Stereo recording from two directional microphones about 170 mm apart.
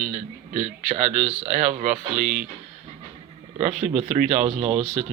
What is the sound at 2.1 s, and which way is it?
Speech, 5° right (ahead or behind).